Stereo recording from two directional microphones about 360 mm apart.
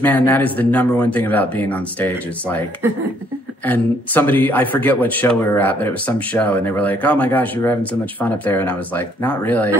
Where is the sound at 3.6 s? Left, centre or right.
Centre.